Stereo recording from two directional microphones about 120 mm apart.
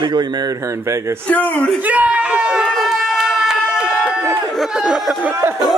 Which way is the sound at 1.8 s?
10° right (ahead or behind).